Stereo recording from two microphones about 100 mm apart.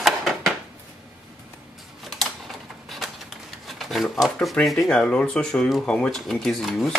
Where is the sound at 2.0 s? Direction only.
Centre (ahead or behind).